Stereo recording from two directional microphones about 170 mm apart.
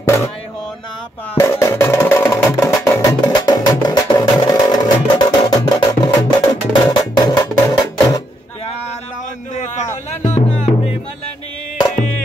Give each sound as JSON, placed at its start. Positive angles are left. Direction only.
{"t": 1.3, "sound": "speech", "side_deg": 15}
{"t": 2.9, "sound": "music", "side_deg": 20}
{"t": 9.6, "sound": "music", "side_deg": 40}